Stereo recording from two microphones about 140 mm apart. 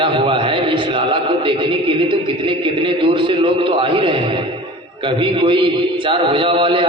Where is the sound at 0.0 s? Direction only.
35° right (ahead or behind).